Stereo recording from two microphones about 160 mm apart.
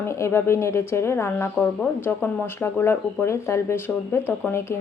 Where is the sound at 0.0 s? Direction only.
15° left (ahead or behind).